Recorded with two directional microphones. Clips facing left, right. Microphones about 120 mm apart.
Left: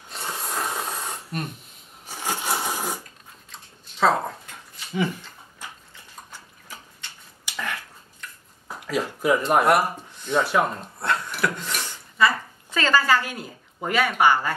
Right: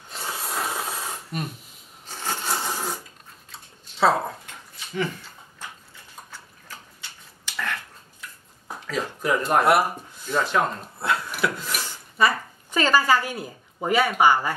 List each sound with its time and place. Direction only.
0.1 s a sound: centre (ahead or behind)
2.0 s sewing machine: 10° left (ahead or behind)
6.7 s a sound: 15° left (ahead or behind)
8.8 s speech: 10° left (ahead or behind)
9.5 s speech: centre (ahead or behind)
10.4 s speech: 10° left (ahead or behind)
11.0 s filing: 5° right (ahead or behind)
12.7 s speech: 15° right (ahead or behind)